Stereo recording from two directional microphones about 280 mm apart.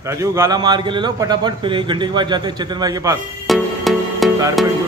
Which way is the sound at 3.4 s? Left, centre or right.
Centre.